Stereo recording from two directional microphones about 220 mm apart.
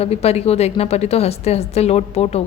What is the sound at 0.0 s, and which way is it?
A woman's voice, 30° left (ahead or behind).